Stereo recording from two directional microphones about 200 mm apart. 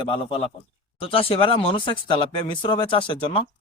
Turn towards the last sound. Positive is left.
turn(degrees=25)  # may be behind; listen again after turning